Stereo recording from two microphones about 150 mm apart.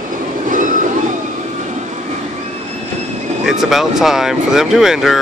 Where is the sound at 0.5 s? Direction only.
60° right (ahead or behind).